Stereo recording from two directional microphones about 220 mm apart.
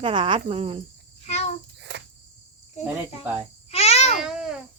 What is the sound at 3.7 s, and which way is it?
Babbling, 30° left (ahead or behind).